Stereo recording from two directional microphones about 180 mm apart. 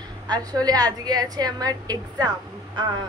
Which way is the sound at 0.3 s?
20° right (ahead or behind).